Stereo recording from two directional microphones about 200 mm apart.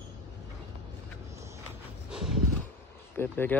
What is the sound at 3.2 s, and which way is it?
Speech, 10° left (ahead or behind).